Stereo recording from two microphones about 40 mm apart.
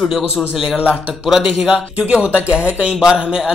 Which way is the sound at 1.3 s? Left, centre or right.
Centre.